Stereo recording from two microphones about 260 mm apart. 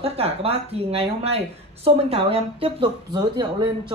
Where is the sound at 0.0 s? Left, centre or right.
Right.